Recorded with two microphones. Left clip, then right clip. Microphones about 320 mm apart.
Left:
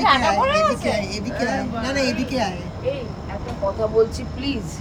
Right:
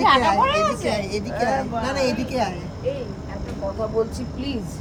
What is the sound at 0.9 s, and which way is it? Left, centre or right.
A woman's voice, centre.